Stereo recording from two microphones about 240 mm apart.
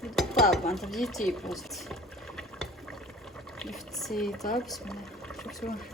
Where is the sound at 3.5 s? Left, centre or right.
Centre.